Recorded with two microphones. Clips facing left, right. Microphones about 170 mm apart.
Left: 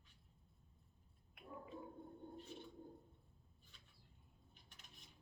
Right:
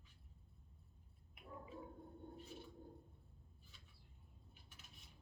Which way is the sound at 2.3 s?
5° right (ahead or behind).